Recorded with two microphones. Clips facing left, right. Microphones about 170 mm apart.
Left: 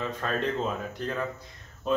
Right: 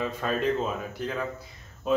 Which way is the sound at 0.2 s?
5° right (ahead or behind).